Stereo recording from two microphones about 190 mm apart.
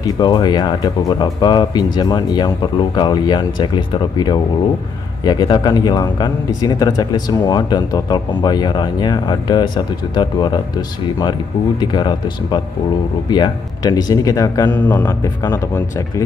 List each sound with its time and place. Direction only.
0.0 s speech: 20° left (ahead or behind)
11.8 s speech: 20° left (ahead or behind)